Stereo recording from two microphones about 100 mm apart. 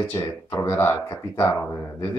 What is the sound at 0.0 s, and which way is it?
Speech, 30° left (ahead or behind).